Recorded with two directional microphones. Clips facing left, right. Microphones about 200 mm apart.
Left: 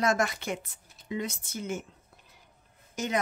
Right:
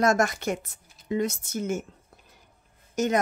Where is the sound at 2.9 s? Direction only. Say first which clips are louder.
Right 7 dB; 45° right (ahead or behind).